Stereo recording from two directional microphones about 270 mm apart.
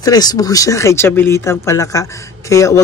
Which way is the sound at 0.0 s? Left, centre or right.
Centre.